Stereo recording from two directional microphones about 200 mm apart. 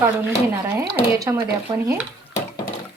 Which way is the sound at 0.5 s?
15° right (ahead or behind).